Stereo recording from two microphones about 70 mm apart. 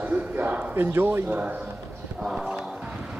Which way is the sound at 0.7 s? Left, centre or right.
Right.